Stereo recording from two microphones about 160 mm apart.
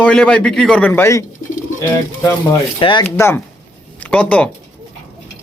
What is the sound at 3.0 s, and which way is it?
Speech, 15° left (ahead or behind).